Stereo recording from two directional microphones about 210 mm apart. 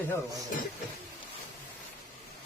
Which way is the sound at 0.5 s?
40° left (ahead or behind).